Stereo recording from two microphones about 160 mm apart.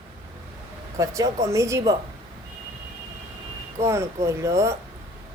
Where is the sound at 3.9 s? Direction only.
15° right (ahead or behind).